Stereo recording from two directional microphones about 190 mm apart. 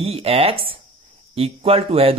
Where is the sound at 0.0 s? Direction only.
30° right (ahead or behind).